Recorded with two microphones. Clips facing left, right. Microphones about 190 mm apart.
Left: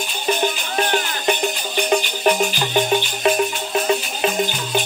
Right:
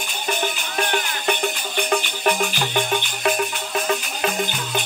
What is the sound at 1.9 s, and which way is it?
Music, 20° left (ahead or behind).